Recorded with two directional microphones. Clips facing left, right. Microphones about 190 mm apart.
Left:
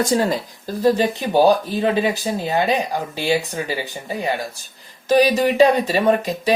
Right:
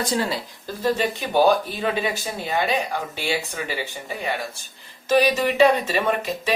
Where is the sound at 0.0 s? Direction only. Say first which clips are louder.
Left 6 dB; 45° left (ahead or behind).